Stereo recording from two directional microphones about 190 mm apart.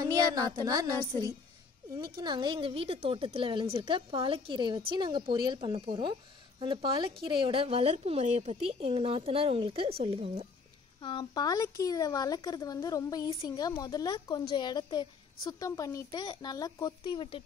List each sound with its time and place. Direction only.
0.0 s a woman's voice: 20° right (ahead or behind)
2.1 s a woman's voice: 25° right (ahead or behind)
11.0 s speech: 25° left (ahead or behind)